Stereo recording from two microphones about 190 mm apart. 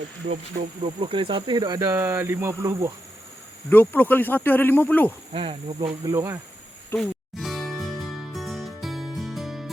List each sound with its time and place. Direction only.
0.2 s speech: 35° right (ahead or behind); by 2.9 s 15° right (ahead or behind)
3.7 s speech: 10° left (ahead or behind)
5.3 s speech: 30° right (ahead or behind)
6.1 s speech: 15° right (ahead or behind)
6.9 s music: centre (ahead or behind)